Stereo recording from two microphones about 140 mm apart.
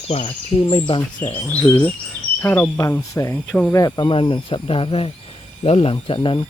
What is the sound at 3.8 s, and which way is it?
Speech, 35° left (ahead or behind).